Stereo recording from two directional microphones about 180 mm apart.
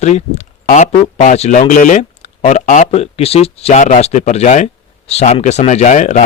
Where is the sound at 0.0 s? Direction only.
40° left (ahead or behind).